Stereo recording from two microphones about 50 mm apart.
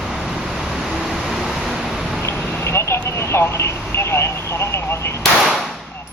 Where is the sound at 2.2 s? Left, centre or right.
Left.